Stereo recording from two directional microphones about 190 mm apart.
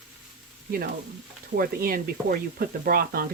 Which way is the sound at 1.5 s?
50° right (ahead or behind).